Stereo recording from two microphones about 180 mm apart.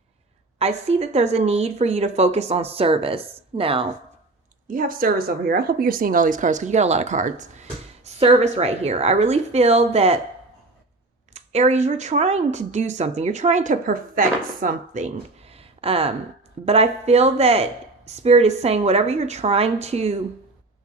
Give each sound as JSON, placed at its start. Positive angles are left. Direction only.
{"t": 0.6, "sound": "speech", "side_deg": -35}
{"t": 4.7, "sound": "speech", "side_deg": -50}
{"t": 11.3, "sound": "speech", "side_deg": -35}